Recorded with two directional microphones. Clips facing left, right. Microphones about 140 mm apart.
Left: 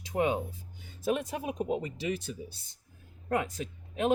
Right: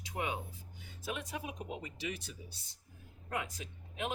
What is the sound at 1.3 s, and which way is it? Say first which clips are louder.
Speech: left 10 dB; 45° left (ahead or behind).